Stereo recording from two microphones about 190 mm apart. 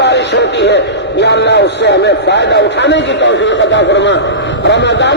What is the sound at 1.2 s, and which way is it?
A man's voice, 65° left (ahead or behind).